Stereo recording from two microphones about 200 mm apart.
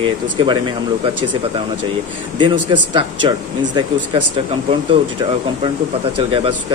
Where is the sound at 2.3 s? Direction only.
25° right (ahead or behind).